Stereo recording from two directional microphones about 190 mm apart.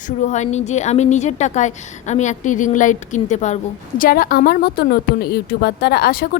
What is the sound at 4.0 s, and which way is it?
A woman's voice, 50° left (ahead or behind).